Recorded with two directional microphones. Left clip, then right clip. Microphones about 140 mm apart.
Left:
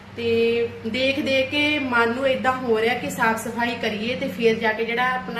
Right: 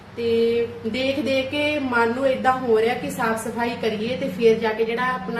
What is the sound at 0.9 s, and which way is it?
Speech, 10° right (ahead or behind).